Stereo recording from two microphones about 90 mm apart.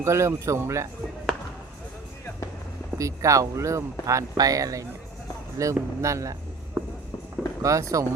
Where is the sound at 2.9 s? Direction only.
35° right (ahead or behind).